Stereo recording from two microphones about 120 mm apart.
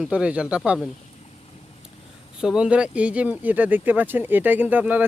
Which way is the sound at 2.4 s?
5° right (ahead or behind).